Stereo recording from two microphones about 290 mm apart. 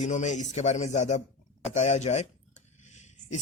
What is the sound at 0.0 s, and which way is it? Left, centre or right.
Speech, left.